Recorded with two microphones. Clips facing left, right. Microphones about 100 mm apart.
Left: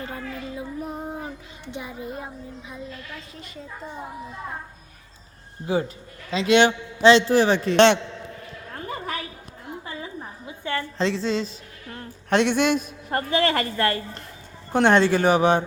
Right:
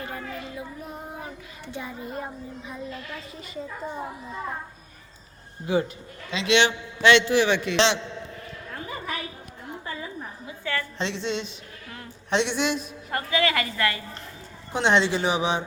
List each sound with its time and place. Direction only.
0.0 s a sound: 25° left (ahead or behind)
1.0 s child singing: 20° left (ahead or behind)
2.1 s speech: 5° left (ahead or behind)
5.6 s a man's voice: 40° left (ahead or behind)
10.6 s a woman's voice: 25° left (ahead or behind)
11.0 s a man's voice: 35° left (ahead or behind)
12.3 s a woman's voice: 50° left (ahead or behind)